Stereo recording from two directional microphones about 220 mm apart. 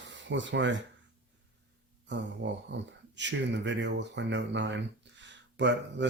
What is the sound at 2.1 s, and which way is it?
Speech, 55° right (ahead or behind).